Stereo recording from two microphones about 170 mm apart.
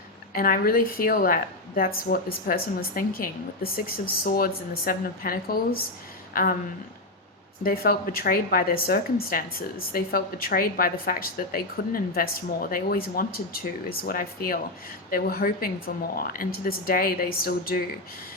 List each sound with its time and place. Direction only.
0.3 s a woman's voice: 60° left (ahead or behind)
7.6 s a woman's voice: 60° left (ahead or behind)